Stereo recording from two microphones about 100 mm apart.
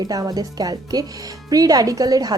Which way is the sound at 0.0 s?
40° right (ahead or behind).